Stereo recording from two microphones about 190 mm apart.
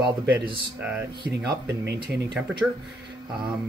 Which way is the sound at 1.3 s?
60° right (ahead or behind).